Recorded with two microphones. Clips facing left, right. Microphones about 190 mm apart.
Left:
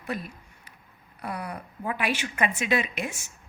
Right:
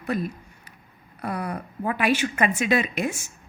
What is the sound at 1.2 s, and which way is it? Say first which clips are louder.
A woman's voice: right 5 dB; 50° right (ahead or behind).